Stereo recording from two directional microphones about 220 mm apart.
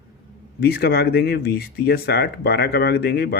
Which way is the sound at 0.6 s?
45° left (ahead or behind).